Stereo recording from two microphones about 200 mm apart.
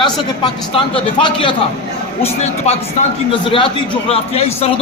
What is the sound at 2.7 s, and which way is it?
Speech, 30° left (ahead or behind).